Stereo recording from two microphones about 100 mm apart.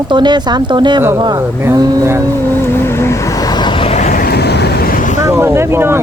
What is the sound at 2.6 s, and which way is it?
Vehicle, 25° left (ahead or behind).